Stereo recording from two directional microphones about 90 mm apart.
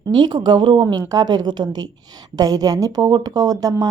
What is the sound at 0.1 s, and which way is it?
Speech, 55° right (ahead or behind).